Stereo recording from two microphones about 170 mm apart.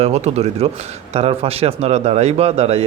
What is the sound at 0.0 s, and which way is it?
Speech, 40° right (ahead or behind).